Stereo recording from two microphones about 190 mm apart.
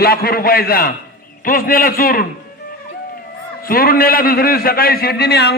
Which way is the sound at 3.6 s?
50° left (ahead or behind).